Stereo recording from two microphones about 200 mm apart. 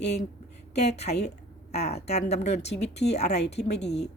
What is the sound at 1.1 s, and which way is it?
Speech, 35° left (ahead or behind).